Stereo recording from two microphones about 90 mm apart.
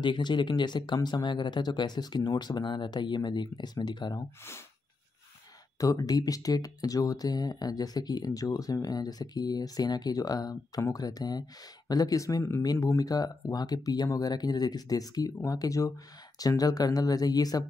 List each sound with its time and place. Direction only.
0.0 s speech: 60° left (ahead or behind)
5.8 s speech: 40° left (ahead or behind)